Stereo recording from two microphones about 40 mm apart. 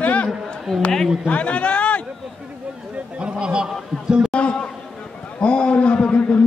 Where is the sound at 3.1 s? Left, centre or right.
Right.